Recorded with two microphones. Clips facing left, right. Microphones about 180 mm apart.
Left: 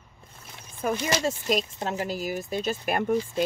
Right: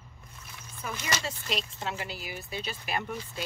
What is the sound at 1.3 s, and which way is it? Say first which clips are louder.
Speech: left 9 dB; 45° left (ahead or behind).